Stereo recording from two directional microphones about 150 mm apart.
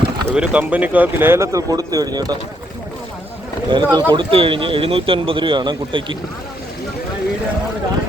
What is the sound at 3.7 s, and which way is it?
Speech, 35° right (ahead or behind).